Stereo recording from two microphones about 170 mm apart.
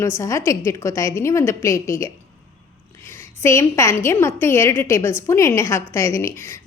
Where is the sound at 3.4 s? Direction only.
15° left (ahead or behind).